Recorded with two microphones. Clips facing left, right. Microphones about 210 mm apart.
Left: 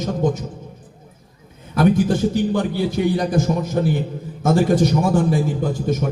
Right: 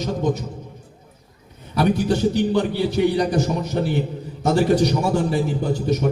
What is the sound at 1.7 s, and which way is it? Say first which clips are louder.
A man's voice: left 3 dB; 50° left (ahead or behind).